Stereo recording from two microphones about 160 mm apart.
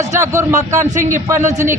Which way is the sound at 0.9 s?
50° right (ahead or behind).